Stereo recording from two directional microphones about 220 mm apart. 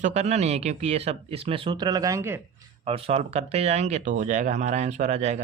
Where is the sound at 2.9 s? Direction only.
25° right (ahead or behind).